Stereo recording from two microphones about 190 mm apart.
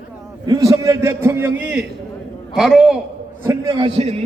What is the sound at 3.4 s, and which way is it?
Speech, 25° right (ahead or behind).